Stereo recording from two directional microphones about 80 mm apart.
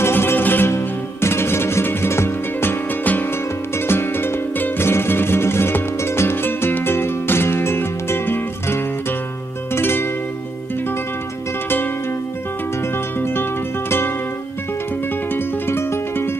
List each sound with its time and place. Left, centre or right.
0.0 s music: left
12.9 s music: left
15.3 s music: left